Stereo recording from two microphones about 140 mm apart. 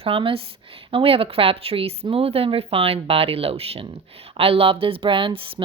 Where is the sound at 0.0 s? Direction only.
40° right (ahead or behind).